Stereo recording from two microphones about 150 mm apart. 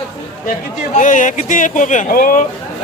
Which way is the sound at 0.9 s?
60° left (ahead or behind).